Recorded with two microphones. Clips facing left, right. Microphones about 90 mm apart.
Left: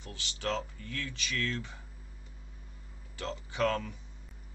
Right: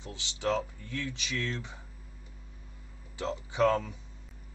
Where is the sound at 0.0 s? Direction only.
20° right (ahead or behind).